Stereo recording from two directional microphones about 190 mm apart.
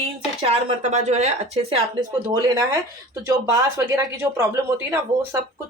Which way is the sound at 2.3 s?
20° right (ahead or behind).